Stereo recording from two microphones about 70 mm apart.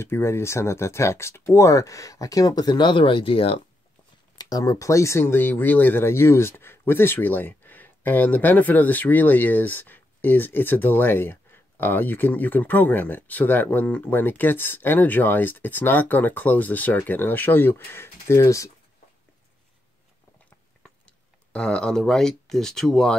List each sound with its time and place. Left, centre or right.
0.0 s speech: left
4.4 s speech: left
21.0 s speech: centre